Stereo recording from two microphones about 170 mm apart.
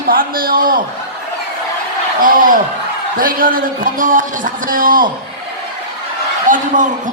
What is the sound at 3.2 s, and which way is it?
A man's voice, 55° right (ahead or behind).